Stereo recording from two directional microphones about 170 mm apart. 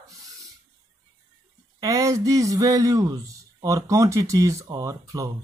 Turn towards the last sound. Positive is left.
turn(degrees=-20)  # may be behind; listen again after turning